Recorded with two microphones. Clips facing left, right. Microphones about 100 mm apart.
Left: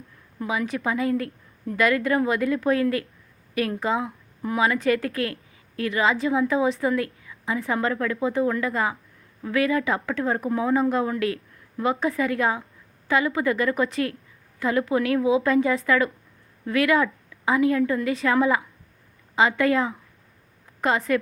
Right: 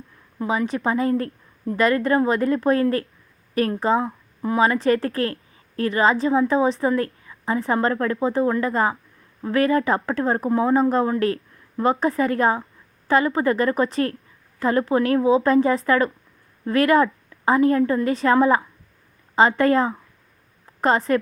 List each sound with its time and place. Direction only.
0.3 s a woman's voice: 30° right (ahead or behind)